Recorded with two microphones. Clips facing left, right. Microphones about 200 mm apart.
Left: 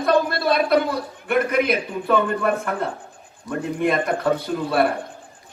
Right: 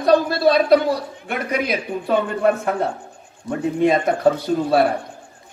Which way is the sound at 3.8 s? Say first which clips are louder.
Right 5 dB; 55° left (ahead or behind).